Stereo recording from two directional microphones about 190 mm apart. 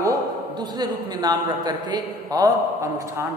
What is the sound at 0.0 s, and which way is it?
A man's voice, 20° right (ahead or behind).